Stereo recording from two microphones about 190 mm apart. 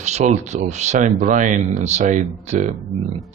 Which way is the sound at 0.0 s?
35° right (ahead or behind).